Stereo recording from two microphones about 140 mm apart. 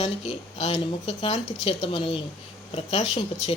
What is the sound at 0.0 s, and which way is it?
Speech, 50° left (ahead or behind).